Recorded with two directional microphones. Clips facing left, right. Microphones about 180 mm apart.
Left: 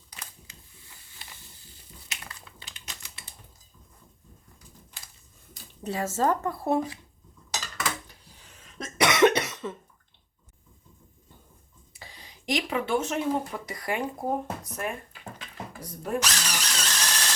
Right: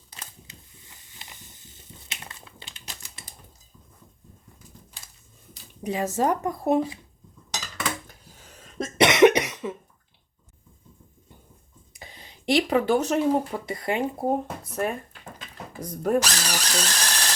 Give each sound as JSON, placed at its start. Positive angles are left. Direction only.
{"t": 1.2, "sound": "crumpling", "side_deg": -20}
{"t": 5.8, "sound": "speech", "side_deg": -15}
{"t": 8.0, "sound": "a sound", "side_deg": -40}
{"t": 9.0, "sound": "cough", "side_deg": -20}
{"t": 11.9, "sound": "speech", "side_deg": -20}
{"t": 16.0, "sound": "drill", "side_deg": -40}